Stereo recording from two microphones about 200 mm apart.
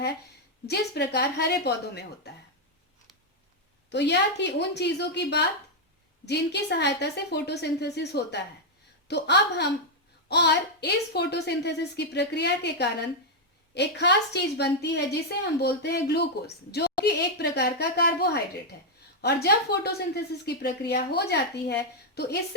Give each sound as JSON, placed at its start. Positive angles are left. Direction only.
{"t": 0.7, "sound": "a woman's voice", "side_deg": 55}
{"t": 3.8, "sound": "a woman's voice", "side_deg": 60}